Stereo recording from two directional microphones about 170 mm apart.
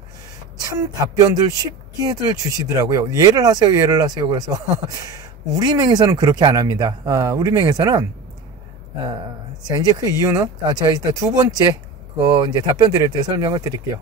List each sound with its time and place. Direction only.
0.6 s speech: 20° right (ahead or behind)
9.7 s speech: 20° right (ahead or behind)